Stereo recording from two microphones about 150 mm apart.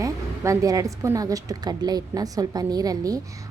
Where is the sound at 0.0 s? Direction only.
20° right (ahead or behind).